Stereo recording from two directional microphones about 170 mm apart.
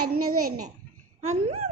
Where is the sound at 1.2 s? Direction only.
40° right (ahead or behind).